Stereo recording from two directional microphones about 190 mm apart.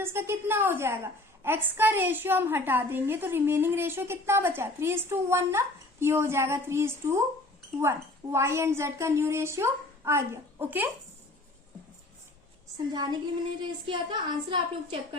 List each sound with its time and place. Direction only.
0.0 s a woman's voice: 10° right (ahead or behind)
8.3 s a woman's voice: 15° right (ahead or behind)
12.9 s a woman's voice: 25° right (ahead or behind)